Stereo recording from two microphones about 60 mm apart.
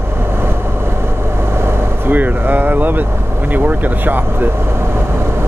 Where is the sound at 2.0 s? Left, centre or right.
Right.